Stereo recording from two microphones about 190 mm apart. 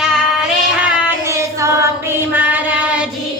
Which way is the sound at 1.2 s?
15° right (ahead or behind).